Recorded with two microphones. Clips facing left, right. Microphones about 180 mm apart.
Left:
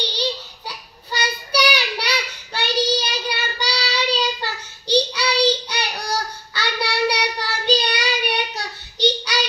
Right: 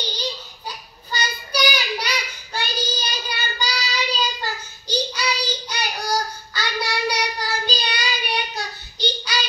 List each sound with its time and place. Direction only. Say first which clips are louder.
0.0 s child singing: left 4 dB; 70° left (ahead or behind)